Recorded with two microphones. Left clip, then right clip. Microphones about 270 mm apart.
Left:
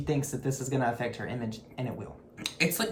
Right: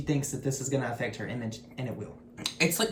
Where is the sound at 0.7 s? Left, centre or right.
Centre.